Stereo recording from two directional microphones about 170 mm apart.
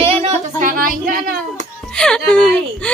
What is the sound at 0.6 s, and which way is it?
Speech, 55° right (ahead or behind).